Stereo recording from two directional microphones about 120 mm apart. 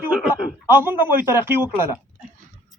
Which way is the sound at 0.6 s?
20° right (ahead or behind).